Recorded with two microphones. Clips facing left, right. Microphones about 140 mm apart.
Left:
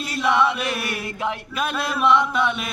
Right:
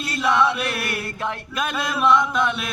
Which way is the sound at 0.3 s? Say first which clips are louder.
Even; 5° left (ahead or behind).